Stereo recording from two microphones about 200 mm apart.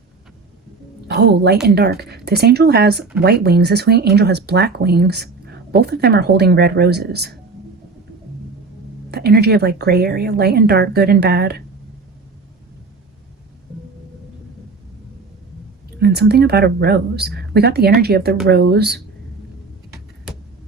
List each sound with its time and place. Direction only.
1.0 s speech: 55° right (ahead or behind)
9.0 s speech: 55° right (ahead or behind)
16.0 s speech: 55° right (ahead or behind)